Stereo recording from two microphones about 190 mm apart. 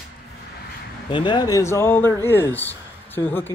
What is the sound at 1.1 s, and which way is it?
Speech, 25° left (ahead or behind).